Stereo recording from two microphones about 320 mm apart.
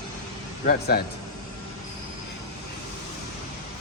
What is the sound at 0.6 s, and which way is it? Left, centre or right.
Speech, left.